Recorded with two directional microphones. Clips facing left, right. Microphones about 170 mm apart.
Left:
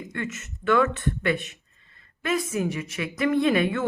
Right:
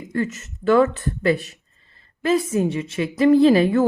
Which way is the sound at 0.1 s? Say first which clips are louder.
Right 12 dB; 35° right (ahead or behind).